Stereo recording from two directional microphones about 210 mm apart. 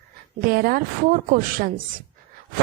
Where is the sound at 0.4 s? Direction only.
45° right (ahead or behind).